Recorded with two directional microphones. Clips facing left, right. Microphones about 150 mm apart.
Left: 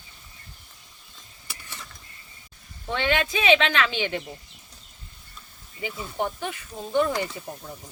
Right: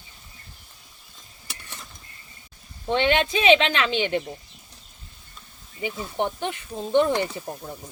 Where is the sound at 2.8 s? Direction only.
20° right (ahead or behind).